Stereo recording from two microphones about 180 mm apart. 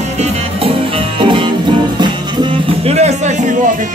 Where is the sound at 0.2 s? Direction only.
30° right (ahead or behind).